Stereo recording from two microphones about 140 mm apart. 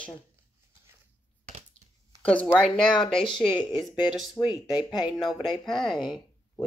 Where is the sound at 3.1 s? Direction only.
35° left (ahead or behind).